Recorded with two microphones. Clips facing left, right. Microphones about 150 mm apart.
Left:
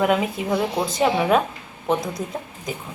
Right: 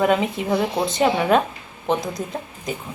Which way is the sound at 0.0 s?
5° left (ahead or behind).